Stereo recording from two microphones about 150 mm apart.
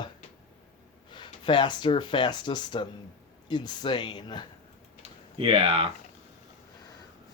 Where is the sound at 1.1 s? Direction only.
30° left (ahead or behind).